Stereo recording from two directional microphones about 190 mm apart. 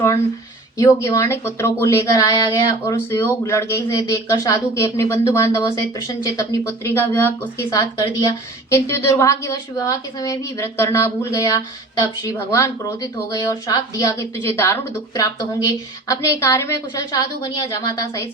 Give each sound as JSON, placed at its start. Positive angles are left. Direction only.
{"t": 0.8, "sound": "a woman's voice", "side_deg": 15}